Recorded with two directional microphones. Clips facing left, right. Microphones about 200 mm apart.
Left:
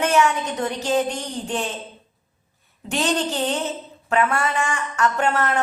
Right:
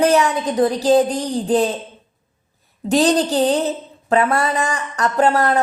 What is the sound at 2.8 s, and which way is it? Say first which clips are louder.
Speech: right 7 dB; 35° right (ahead or behind).